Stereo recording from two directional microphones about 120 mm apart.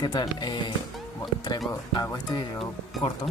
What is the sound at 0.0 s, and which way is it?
Speech, 35° left (ahead or behind).